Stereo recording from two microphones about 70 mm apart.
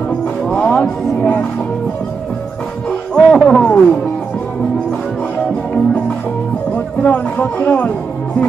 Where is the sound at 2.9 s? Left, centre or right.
Centre.